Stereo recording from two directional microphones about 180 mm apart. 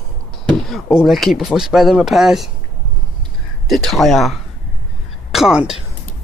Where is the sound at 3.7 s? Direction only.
Centre (ahead or behind).